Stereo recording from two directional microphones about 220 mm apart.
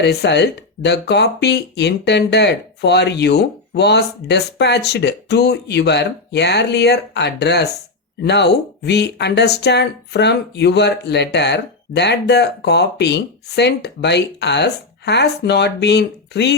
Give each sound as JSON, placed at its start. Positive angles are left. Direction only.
{"t": 0.0, "sound": "speech", "side_deg": 50}